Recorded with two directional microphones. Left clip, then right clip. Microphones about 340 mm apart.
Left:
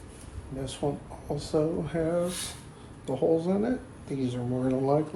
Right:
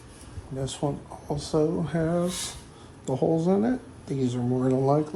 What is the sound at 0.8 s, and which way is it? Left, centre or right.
Speech, right.